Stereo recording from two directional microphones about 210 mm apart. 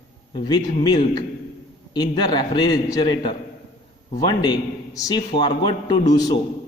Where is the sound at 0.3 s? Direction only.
20° left (ahead or behind).